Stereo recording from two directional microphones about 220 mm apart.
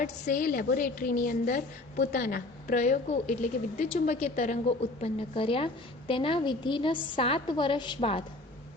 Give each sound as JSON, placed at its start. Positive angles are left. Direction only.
{"t": 0.0, "sound": "a woman's voice", "side_deg": 40}